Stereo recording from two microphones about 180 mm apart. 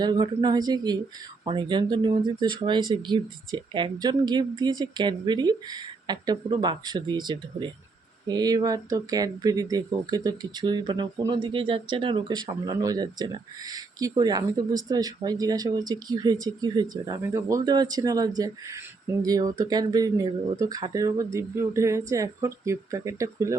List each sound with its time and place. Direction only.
0.0 s speech: 25° right (ahead or behind)